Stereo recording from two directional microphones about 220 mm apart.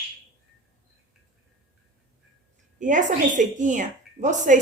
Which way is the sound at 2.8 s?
35° right (ahead or behind).